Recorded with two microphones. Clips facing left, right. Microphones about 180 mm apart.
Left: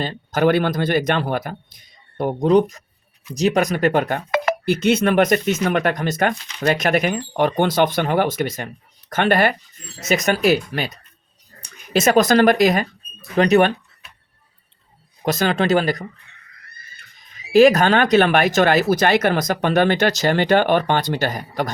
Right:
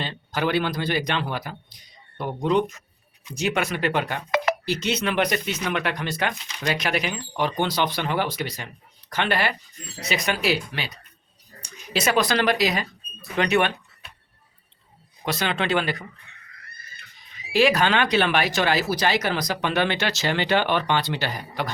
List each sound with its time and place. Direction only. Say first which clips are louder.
0.0 s speech: left 8 dB; 45° left (ahead or behind)
13.3 s speech: left 7 dB; 40° left (ahead or behind)
15.2 s speech: left 7 dB; 45° left (ahead or behind)
17.5 s speech: left 7 dB; 45° left (ahead or behind)